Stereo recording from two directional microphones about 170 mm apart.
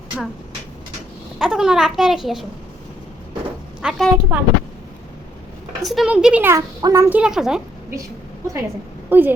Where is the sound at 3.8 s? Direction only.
5° right (ahead or behind).